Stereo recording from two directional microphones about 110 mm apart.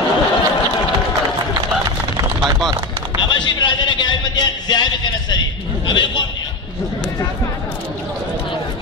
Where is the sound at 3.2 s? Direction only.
45° left (ahead or behind).